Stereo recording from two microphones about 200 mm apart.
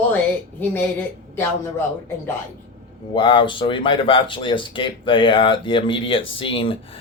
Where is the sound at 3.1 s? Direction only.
25° left (ahead or behind).